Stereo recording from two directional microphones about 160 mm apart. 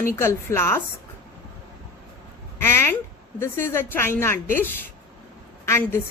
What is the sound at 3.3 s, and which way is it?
A woman's voice, 15° left (ahead or behind).